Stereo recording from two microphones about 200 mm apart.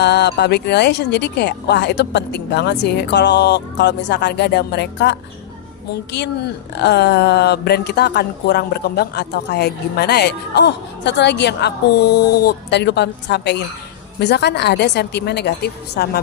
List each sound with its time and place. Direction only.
0.0 s speech: 60° left (ahead or behind)